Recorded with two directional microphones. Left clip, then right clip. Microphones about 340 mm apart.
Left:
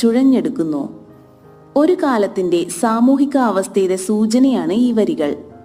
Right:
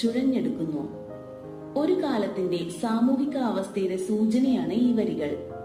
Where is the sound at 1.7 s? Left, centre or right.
Left.